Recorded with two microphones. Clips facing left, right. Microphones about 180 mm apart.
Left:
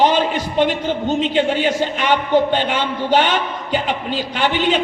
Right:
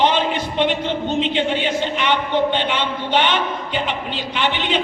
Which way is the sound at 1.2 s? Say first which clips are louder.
Left 3 dB; 40° left (ahead or behind).